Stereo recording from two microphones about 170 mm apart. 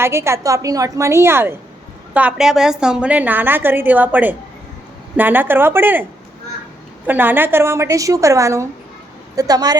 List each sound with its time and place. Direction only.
0.0 s a woman's voice: 15° right (ahead or behind)
7.1 s a woman's voice: 10° right (ahead or behind)